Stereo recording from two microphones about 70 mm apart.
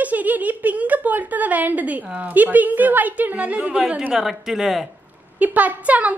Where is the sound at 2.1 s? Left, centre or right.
Right; by 4.9 s centre.